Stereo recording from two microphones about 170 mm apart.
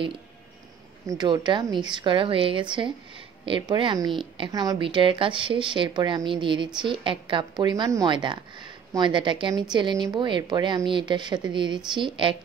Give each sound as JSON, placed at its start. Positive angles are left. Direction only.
{"t": 1.0, "sound": "a woman's voice", "side_deg": -25}